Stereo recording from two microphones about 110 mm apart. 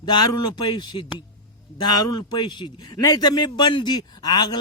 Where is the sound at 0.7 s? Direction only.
45° left (ahead or behind).